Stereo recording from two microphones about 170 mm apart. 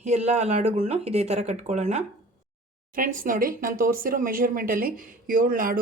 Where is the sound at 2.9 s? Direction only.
55° right (ahead or behind).